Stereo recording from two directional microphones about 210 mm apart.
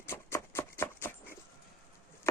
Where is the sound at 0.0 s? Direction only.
10° left (ahead or behind).